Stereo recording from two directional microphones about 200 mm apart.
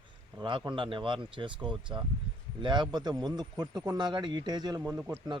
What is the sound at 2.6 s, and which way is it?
A man's voice, 25° right (ahead or behind).